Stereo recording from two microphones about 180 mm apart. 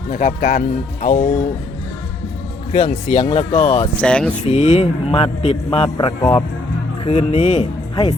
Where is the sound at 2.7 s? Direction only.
45° left (ahead or behind).